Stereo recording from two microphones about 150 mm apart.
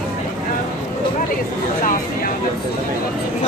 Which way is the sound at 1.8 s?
65° left (ahead or behind).